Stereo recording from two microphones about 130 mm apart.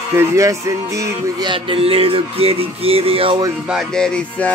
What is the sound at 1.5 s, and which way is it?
Music, 45° right (ahead or behind).